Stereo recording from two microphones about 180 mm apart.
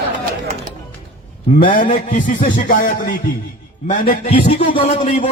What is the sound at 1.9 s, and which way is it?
Speech, 45° left (ahead or behind).